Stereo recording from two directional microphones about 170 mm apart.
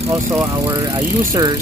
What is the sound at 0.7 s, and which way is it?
Speech, 25° right (ahead or behind).